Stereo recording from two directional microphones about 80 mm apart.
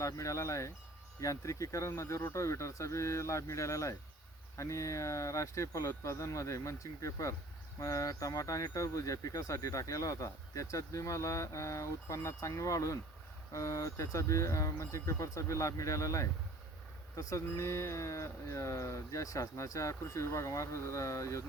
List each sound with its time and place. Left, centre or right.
0.0 s speech: left